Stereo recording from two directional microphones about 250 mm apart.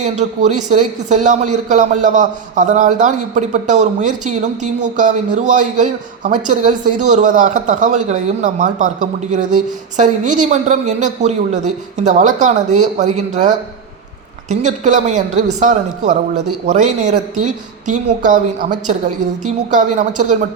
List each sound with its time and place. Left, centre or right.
0.0 s speech: right